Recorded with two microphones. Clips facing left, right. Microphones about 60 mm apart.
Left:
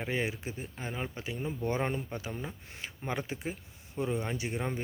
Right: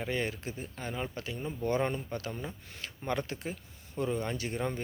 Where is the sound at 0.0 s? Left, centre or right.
Centre.